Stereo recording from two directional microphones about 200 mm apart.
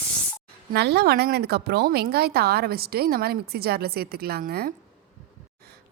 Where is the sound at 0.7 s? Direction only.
55° right (ahead or behind).